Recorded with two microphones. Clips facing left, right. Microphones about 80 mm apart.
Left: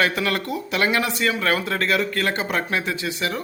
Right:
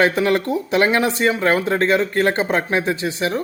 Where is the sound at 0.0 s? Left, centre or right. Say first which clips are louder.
Right 6 dB; right.